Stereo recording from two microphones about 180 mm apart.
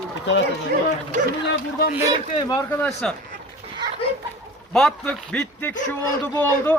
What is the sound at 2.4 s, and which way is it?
Speech, 20° left (ahead or behind).